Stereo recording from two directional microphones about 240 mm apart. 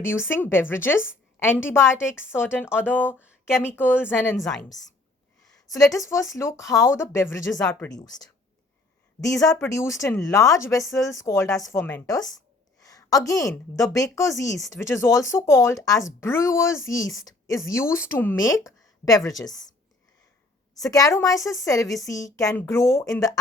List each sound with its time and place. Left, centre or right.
0.0 s a woman's voice: centre
2.6 s a woman's voice: centre
3.1 s a sound: centre
3.5 s a woman's voice: centre
5.9 s a woman's voice: centre
7.9 s a woman's voice: centre
20.7 s a woman's voice: centre